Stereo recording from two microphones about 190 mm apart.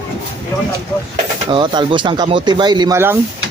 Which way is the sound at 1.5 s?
25° right (ahead or behind).